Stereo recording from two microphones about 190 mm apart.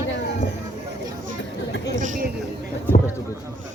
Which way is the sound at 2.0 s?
40° right (ahead or behind).